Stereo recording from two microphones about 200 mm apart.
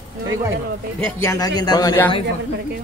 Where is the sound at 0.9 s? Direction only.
10° left (ahead or behind).